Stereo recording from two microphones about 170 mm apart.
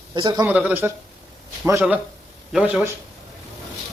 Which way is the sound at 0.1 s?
25° right (ahead or behind).